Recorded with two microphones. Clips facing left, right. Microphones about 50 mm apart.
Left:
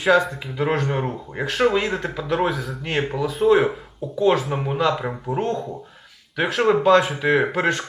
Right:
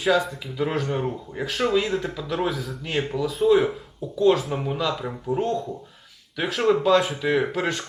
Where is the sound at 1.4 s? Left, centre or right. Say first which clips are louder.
Left 3 dB; centre.